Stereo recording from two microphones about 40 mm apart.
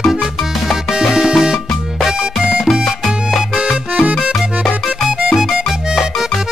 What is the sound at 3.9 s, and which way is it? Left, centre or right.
Music, right.